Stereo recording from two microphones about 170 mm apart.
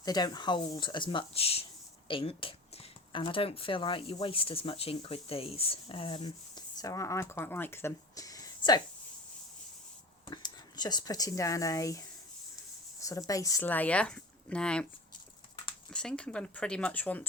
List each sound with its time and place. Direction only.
0.0 s speech: 20° left (ahead or behind)
10.2 s speech: 25° left (ahead or behind); by 14.8 s 5° left (ahead or behind)
15.9 s speech: 5° left (ahead or behind)